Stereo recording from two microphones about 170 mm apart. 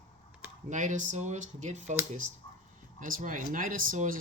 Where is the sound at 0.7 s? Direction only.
45° right (ahead or behind).